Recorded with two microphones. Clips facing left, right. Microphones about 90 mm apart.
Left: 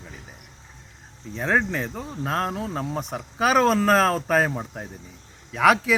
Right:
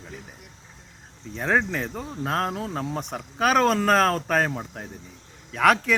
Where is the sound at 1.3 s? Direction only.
Centre (ahead or behind).